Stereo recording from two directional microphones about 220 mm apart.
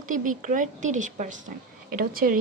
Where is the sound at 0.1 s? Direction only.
35° right (ahead or behind).